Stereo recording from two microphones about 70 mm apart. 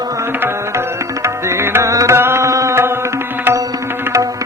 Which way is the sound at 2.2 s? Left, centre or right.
Right.